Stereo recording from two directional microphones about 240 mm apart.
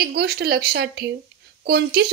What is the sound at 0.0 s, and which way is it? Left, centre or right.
Speech, right.